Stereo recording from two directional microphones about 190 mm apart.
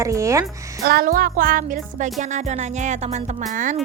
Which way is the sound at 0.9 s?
50° right (ahead or behind).